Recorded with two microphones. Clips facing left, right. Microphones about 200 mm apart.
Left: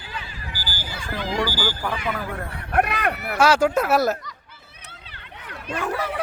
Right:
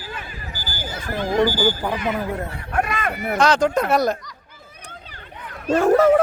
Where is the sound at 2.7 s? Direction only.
65° left (ahead or behind).